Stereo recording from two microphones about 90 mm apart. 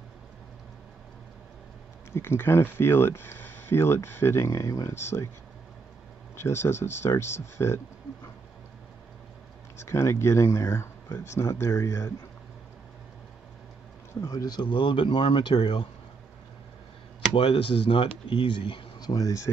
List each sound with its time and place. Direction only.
2.1 s speech: 25° left (ahead or behind)
6.3 s speech: 30° left (ahead or behind)
9.8 s speech: 30° left (ahead or behind)
14.2 s speech: 45° left (ahead or behind); by 15.9 s 65° left (ahead or behind)
17.3 s speech: 80° left
18.9 s speech: 45° left (ahead or behind)